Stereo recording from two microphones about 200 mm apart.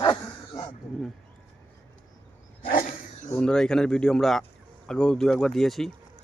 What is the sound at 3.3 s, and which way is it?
Speech, 5° left (ahead or behind).